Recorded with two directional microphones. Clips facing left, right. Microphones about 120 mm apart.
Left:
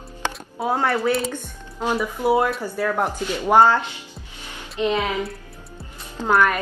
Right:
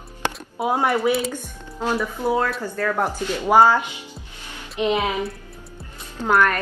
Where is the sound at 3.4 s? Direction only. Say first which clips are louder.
Even; 10° right (ahead or behind).